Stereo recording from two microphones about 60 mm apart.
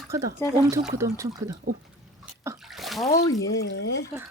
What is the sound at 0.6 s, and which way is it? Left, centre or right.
Speech, right.